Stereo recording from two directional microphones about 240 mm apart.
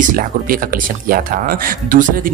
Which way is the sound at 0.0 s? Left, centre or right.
Right.